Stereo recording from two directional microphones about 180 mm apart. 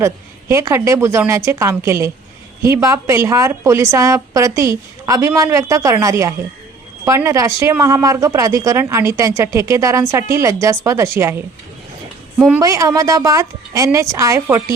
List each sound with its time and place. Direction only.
0.0 s speech: 15° right (ahead or behind)
12.5 s speech: 20° right (ahead or behind)